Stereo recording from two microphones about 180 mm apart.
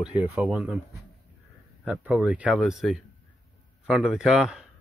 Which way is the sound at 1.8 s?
5° right (ahead or behind).